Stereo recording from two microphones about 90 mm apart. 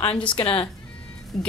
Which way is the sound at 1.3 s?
5° left (ahead or behind).